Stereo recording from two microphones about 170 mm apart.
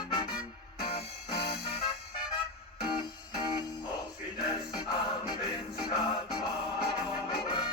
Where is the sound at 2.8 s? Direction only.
25° left (ahead or behind).